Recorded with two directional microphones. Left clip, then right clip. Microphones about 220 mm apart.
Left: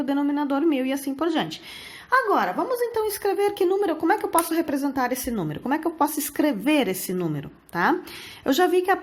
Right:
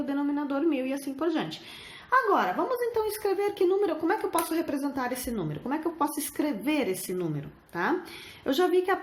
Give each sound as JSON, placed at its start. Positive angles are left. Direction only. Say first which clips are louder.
{"t": 0.0, "sound": "a woman's voice", "louder": "left 6 dB", "side_deg": 35}